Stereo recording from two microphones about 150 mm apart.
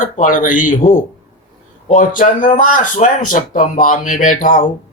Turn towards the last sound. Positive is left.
turn(degrees=65)  # may be behind; listen again after turning